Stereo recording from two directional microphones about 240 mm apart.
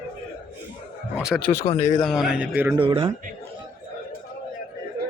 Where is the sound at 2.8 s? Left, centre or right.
Right.